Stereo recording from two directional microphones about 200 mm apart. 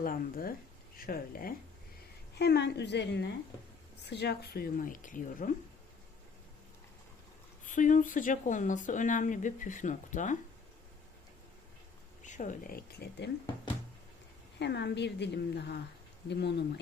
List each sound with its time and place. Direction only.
0.0 s a woman's voice: 45° left (ahead or behind)
7.6 s speech: 40° left (ahead or behind)
12.2 s speech: 40° left (ahead or behind); by 13.3 s 55° left (ahead or behind)
14.6 s a woman's voice: 55° left (ahead or behind)